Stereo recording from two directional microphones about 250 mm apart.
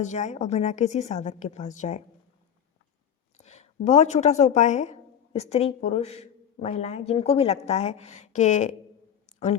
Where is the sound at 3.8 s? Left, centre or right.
Left.